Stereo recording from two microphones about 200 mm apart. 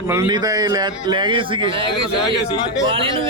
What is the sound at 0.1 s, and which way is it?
A man's voice, 20° right (ahead or behind).